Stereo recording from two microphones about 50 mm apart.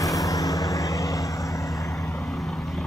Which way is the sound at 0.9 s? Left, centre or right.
Left.